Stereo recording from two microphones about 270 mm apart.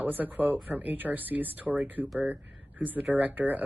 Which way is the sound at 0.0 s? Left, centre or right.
Centre.